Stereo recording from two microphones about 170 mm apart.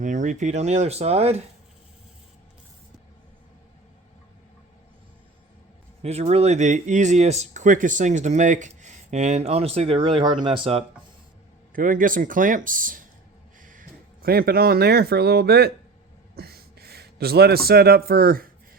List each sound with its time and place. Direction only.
0.0 s speech: 45° right (ahead or behind)
6.0 s speech: 40° right (ahead or behind)
11.7 s speech: 55° right (ahead or behind); by 15.7 s 70° right (ahead or behind)
16.3 s a sound: 65° right (ahead or behind)
17.7 s speech: 65° right (ahead or behind)